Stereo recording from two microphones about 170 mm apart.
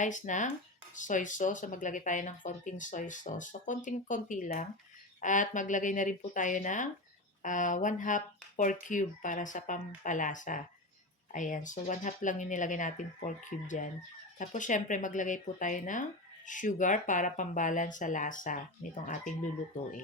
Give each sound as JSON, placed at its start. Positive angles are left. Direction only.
{"t": 0.0, "sound": "speech", "side_deg": 45}